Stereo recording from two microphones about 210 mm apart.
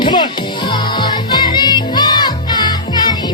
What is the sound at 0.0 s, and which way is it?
Music, 20° left (ahead or behind).